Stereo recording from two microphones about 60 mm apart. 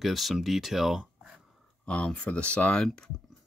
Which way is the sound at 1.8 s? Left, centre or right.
Centre.